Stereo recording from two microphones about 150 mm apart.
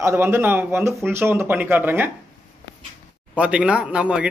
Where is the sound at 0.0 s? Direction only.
15° right (ahead or behind).